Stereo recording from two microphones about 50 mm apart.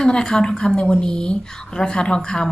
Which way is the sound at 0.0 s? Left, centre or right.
Centre.